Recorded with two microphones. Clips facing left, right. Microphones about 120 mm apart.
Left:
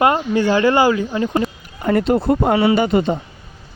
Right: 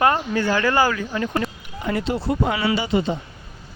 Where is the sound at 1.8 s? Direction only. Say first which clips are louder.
Left 7 dB; 50° left (ahead or behind).